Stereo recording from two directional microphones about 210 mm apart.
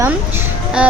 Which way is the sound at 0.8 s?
5° right (ahead or behind).